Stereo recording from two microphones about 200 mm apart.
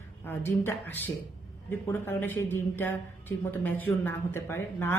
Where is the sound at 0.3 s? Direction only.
10° left (ahead or behind).